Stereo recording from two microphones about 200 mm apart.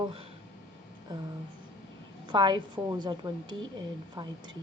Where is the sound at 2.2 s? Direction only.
20° right (ahead or behind).